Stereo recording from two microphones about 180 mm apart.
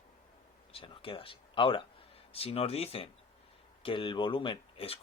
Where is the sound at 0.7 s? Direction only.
30° left (ahead or behind).